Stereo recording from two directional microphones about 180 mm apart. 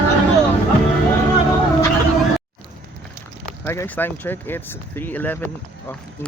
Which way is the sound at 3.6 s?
15° left (ahead or behind).